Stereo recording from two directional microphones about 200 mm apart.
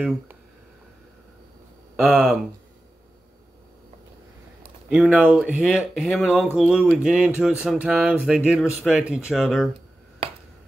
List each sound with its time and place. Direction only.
2.0 s speech: centre (ahead or behind)
4.8 s speech: centre (ahead or behind)